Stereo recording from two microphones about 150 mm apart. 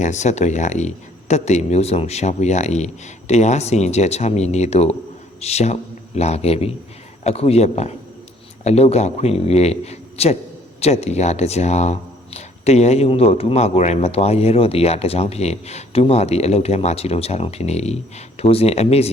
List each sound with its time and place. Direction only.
0.0 s speech: 50° left (ahead or behind)